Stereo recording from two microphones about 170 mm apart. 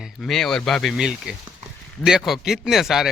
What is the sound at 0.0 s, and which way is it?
Speech, centre (ahead or behind).